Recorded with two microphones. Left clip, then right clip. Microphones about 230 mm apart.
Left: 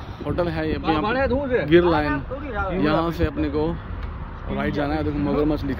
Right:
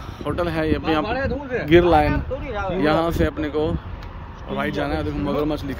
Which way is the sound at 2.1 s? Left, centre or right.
Right.